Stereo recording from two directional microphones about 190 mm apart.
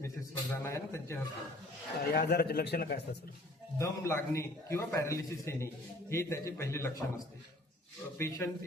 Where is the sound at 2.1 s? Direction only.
55° left (ahead or behind).